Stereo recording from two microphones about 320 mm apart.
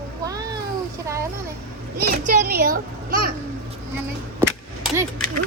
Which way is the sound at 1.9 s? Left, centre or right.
Right.